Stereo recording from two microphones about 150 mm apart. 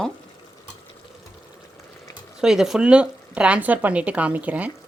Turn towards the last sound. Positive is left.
turn(degrees=-10)  # may be behind; listen again after turning